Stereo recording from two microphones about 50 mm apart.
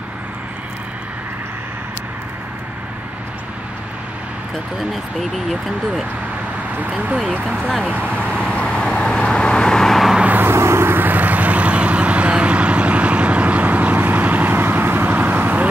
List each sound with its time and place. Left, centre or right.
5.3 s speech: centre
6.8 s speech: right
8.1 s vehicle: centre
10.2 s vehicle: right
10.5 s vehicle: right